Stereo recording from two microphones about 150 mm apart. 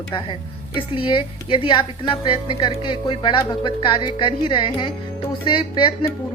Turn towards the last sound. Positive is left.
turn(degrees=35)  # may be behind; listen again after turning